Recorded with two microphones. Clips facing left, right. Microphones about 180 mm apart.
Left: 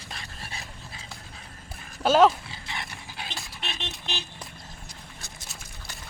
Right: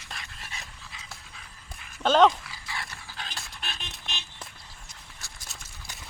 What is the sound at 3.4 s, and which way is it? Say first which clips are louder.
Dog: left 3 dB; 5° left (ahead or behind).